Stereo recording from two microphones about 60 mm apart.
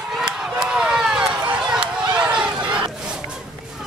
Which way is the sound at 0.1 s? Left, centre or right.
Centre.